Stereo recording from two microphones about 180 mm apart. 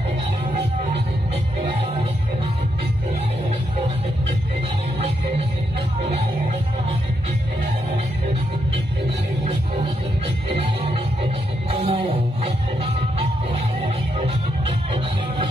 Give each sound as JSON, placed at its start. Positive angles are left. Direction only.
{"t": 10.5, "sound": "music", "side_deg": -35}